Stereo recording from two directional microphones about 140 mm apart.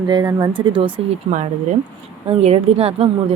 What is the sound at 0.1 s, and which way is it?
Speech, 30° right (ahead or behind).